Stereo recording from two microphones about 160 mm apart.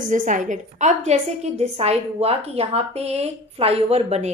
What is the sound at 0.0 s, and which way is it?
A woman's voice, 55° right (ahead or behind).